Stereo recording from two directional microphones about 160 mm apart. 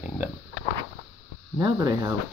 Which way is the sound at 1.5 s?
25° right (ahead or behind).